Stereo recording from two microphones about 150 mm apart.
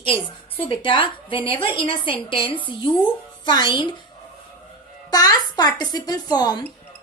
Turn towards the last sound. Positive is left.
turn(degrees=25)  # may be behind; listen again after turning